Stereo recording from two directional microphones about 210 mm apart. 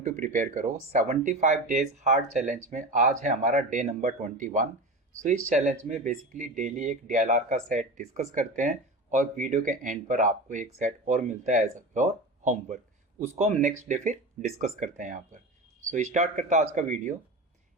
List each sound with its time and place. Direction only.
0.0 s speech: 40° right (ahead or behind)